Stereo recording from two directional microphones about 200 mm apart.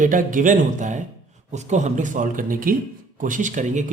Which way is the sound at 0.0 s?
40° right (ahead or behind).